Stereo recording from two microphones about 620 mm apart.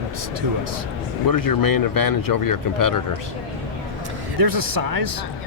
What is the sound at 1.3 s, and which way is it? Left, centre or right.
Speech, left.